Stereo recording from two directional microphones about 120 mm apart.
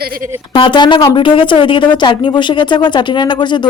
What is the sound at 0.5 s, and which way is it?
Speech, 45° left (ahead or behind).